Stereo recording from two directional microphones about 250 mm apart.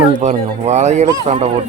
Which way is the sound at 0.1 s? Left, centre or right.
Right.